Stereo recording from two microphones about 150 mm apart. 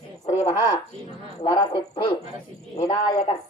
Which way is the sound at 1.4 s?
30° left (ahead or behind).